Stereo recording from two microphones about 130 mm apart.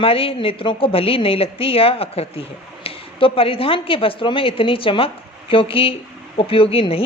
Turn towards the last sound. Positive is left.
turn(degrees=45)  # may be behind; listen again after turning